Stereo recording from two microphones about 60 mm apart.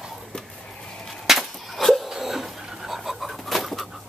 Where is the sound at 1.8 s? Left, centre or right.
Centre.